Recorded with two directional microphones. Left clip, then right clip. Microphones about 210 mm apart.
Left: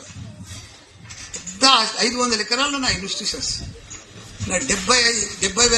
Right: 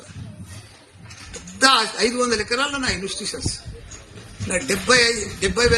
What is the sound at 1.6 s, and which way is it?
A man's voice, 55° right (ahead or behind).